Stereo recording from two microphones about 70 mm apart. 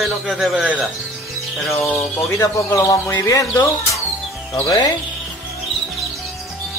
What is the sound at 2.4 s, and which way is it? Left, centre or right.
Speech, left.